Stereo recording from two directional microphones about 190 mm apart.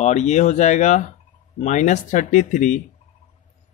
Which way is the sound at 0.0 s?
35° left (ahead or behind).